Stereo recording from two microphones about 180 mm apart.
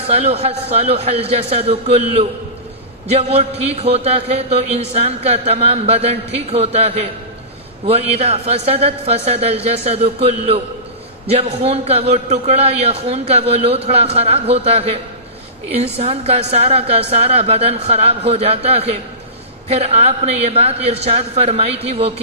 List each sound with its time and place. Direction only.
0.0 s speech: 35° right (ahead or behind)